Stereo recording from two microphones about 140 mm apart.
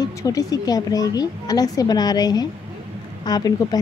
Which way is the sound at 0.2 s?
25° left (ahead or behind).